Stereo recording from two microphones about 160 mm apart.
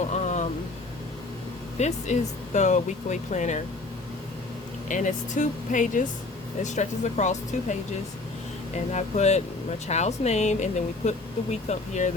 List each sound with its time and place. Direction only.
0.1 s a sound: 45° left (ahead or behind)
1.8 s speech: 45° left (ahead or behind)
4.9 s speech: 50° left (ahead or behind)
8.9 s speech: 45° left (ahead or behind)